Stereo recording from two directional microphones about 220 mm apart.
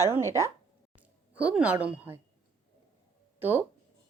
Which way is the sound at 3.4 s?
10° right (ahead or behind).